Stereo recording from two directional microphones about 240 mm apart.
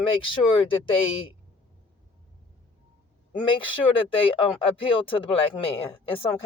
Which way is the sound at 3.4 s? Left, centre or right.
Left.